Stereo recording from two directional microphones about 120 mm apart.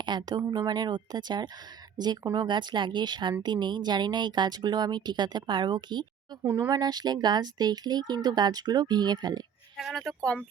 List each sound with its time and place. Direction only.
0.0 s speech: 35° right (ahead or behind)
9.7 s speech: centre (ahead or behind)